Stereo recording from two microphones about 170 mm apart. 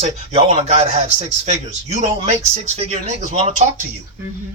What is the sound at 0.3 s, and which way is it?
Speech, 40° right (ahead or behind).